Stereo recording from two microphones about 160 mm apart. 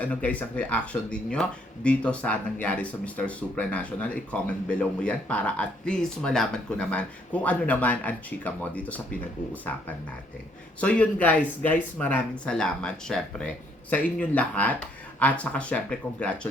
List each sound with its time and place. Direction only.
0.0 s speech: 10° left (ahead or behind)
10.8 s speech: 10° left (ahead or behind)